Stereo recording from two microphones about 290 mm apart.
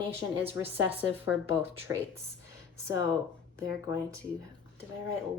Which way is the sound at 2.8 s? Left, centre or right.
Centre.